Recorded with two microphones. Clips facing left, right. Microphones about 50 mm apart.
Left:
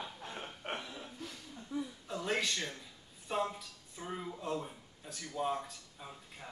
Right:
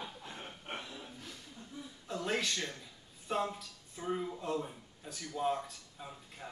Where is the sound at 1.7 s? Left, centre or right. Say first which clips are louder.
Left 10 dB; left.